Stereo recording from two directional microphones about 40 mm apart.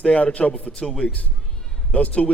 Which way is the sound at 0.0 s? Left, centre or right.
Left.